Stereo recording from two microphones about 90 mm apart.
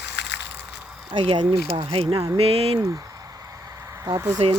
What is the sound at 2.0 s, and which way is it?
Speech, 50° right (ahead or behind).